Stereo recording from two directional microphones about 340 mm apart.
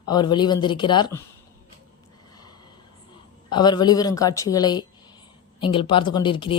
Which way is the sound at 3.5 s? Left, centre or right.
Centre.